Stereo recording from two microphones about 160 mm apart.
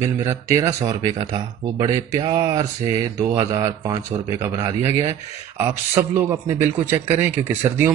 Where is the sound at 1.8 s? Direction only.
25° right (ahead or behind).